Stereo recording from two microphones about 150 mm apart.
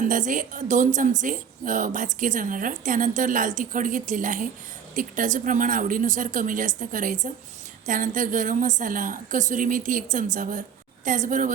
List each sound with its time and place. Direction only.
0.0 s a woman's voice: 60° right (ahead or behind)